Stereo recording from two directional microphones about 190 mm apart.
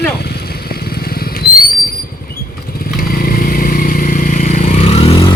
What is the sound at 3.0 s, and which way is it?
Vehicle, 50° left (ahead or behind).